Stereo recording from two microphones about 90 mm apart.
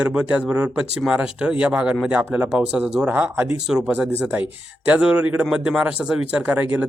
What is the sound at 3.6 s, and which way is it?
Speech, 10° right (ahead or behind).